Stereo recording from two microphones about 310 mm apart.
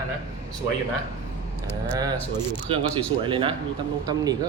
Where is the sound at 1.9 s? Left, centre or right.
Centre.